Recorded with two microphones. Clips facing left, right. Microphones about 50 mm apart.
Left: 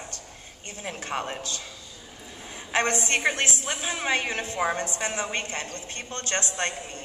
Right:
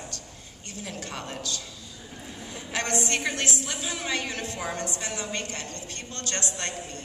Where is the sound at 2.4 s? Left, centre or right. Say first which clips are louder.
Left 6 dB; left.